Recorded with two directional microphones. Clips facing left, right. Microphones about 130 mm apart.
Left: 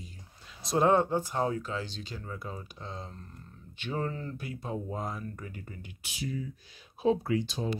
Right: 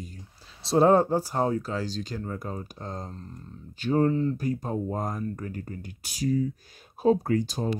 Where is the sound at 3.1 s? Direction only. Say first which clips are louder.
Right 7 dB; 30° right (ahead or behind).